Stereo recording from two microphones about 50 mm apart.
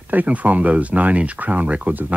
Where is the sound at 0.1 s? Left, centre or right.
Right.